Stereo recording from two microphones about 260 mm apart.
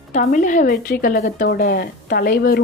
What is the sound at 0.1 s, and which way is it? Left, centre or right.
A woman's voice, left.